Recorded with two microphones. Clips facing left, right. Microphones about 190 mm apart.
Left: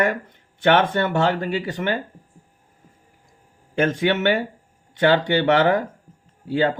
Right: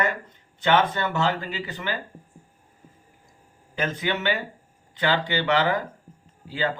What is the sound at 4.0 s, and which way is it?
Speech, 60° left (ahead or behind).